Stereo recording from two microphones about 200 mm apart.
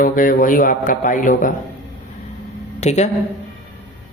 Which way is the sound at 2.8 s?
35° left (ahead or behind).